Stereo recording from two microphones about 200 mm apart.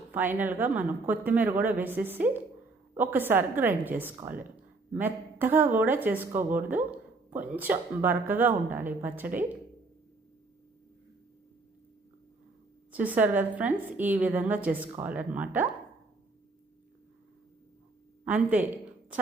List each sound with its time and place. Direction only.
0.1 s a woman's voice: 10° right (ahead or behind)
12.9 s a woman's voice: 10° right (ahead or behind)
18.3 s a woman's voice: 10° right (ahead or behind)